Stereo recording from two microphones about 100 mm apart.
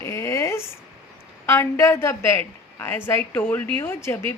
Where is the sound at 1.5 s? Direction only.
25° left (ahead or behind).